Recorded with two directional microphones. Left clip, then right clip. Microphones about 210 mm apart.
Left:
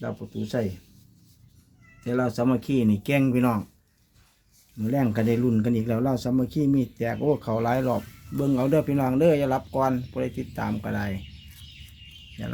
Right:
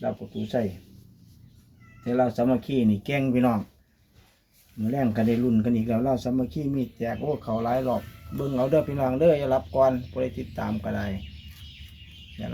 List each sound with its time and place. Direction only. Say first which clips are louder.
0.0 s speech: right 3 dB; 35° left (ahead or behind)
2.0 s speech: right 2 dB; 40° left (ahead or behind)
4.8 s speech: even; 40° left (ahead or behind)
8.5 s speech: right 1 dB; 35° left (ahead or behind)